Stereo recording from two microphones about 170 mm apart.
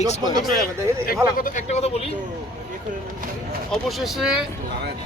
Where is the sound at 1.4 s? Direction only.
45° left (ahead or behind).